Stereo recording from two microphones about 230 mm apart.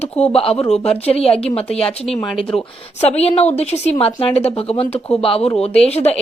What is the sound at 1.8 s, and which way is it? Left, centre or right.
Speech, centre.